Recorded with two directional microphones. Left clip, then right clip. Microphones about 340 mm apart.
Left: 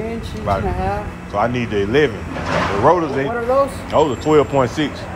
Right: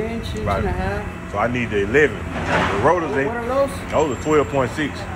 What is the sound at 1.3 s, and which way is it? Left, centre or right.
Speech, centre.